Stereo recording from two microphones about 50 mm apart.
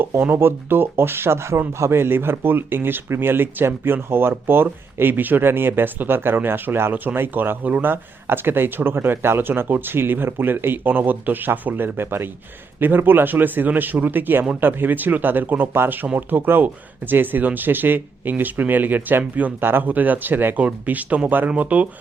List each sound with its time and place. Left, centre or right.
0.0 s speech: right
6.9 s speech: right